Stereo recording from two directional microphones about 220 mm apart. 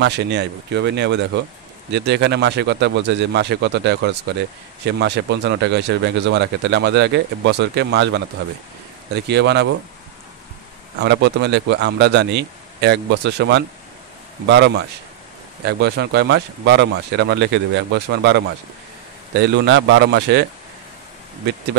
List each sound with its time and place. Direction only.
0.0 s speech: 50° right (ahead or behind)
11.0 s speech: 50° right (ahead or behind)